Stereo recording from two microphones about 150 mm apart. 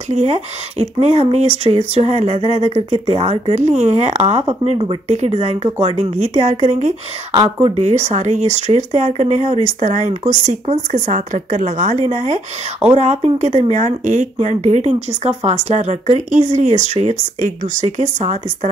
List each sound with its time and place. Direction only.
0.1 s speech: 45° right (ahead or behind)